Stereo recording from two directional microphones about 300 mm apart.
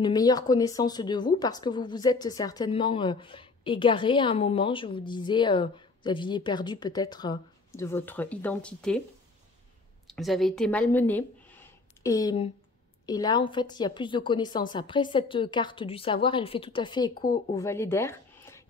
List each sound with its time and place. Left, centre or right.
0.0 s a woman's voice: centre
10.0 s a woman's voice: centre